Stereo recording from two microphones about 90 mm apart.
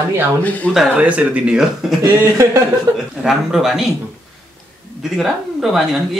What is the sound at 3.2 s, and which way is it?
Speech, 5° right (ahead or behind).